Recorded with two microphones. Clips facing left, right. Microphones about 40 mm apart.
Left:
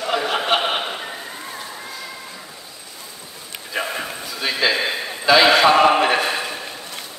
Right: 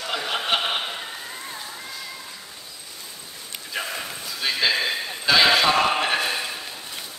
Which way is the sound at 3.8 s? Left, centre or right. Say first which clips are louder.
Left 6 dB; left.